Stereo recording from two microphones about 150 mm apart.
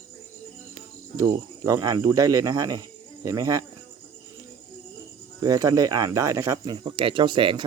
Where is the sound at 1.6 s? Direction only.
25° right (ahead or behind).